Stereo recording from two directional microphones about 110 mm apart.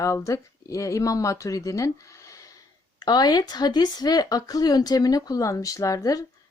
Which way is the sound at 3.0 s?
40° left (ahead or behind).